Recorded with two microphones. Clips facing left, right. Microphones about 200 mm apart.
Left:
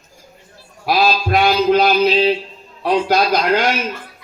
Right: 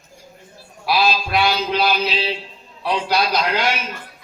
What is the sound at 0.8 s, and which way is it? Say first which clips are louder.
Speech: left 3 dB; 45° left (ahead or behind).